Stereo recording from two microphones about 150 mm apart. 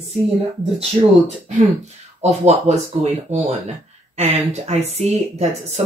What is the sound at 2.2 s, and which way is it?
Speech, 45° right (ahead or behind).